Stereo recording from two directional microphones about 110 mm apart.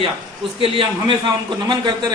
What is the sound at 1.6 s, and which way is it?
Speech, 40° right (ahead or behind).